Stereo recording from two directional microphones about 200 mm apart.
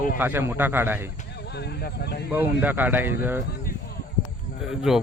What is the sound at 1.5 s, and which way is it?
Speech, 55° left (ahead or behind).